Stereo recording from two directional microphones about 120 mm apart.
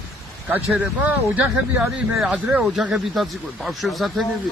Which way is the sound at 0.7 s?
15° right (ahead or behind).